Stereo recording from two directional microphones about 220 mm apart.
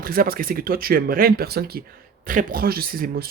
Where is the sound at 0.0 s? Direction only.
40° right (ahead or behind).